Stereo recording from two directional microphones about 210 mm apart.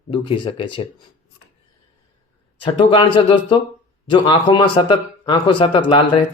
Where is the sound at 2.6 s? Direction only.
25° left (ahead or behind).